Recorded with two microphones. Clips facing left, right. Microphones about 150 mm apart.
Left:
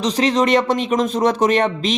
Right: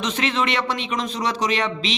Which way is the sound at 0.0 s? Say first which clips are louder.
Left 6 dB; 35° left (ahead or behind).